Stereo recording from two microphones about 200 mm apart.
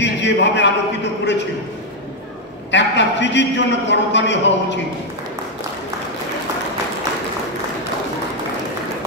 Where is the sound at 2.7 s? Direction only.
60° left (ahead or behind).